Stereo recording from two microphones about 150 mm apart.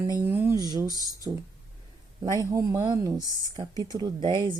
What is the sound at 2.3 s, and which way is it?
A woman's voice, 20° right (ahead or behind).